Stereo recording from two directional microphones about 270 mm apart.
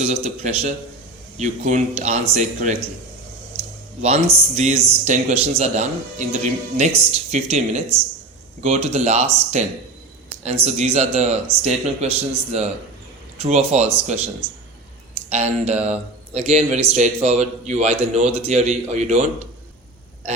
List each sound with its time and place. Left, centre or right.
0.0 s speech: right
4.0 s speech: right
15.3 s speech: right